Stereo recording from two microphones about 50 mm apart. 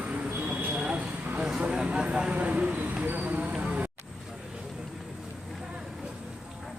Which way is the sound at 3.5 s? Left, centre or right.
Centre.